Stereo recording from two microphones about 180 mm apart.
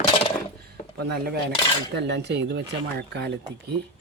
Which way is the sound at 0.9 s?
65° right (ahead or behind).